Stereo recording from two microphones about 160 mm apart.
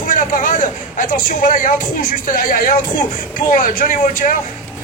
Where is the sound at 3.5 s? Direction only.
55° left (ahead or behind).